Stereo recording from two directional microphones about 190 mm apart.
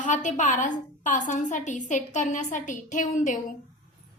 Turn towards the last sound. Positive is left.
turn(degrees=40)  # may be behind; listen again after turning